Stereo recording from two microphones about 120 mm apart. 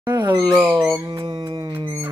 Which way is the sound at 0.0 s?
20° right (ahead or behind).